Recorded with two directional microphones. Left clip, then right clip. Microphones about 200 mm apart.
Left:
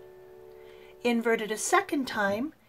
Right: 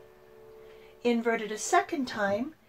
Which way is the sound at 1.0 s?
30° left (ahead or behind).